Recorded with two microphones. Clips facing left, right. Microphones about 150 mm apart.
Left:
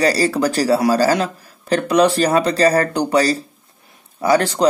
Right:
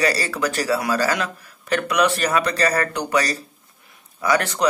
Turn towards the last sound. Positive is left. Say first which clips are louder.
# left 5 dB
turn(degrees=30)  # may be behind; listen again after turning